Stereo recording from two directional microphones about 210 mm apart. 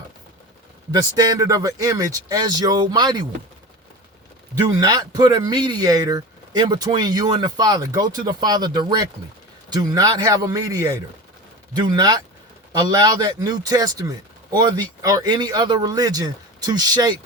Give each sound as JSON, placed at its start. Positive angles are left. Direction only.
{"t": 0.9, "sound": "speech", "side_deg": -15}
{"t": 4.5, "sound": "speech", "side_deg": -20}